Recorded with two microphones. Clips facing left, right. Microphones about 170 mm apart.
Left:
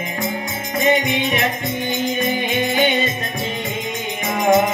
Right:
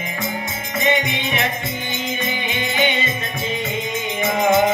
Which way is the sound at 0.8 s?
45° left (ahead or behind).